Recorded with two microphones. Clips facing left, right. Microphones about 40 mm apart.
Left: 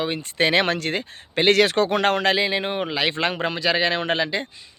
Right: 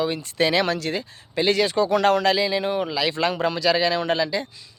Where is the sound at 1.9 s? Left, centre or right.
Left.